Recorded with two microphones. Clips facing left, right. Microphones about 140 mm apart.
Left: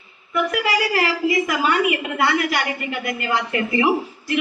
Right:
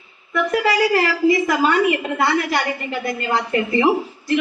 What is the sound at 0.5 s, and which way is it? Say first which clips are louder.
A woman's voice: right 7 dB; 30° right (ahead or behind).